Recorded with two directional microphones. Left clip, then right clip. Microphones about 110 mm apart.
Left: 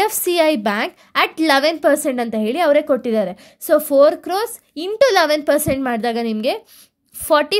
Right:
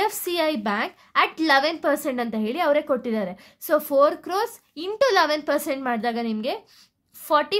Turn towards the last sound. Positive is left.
turn(degrees=50)  # may be behind; listen again after turning